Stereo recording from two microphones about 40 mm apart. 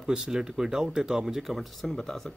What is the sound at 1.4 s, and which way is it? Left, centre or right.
Speech, centre.